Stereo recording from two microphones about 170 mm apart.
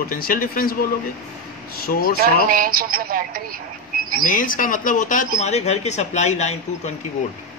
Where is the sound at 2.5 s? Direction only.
60° right (ahead or behind).